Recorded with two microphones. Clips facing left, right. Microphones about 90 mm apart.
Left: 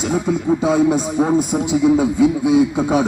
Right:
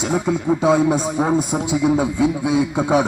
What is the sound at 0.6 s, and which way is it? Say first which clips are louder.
A man's voice: right 1 dB; 25° right (ahead or behind).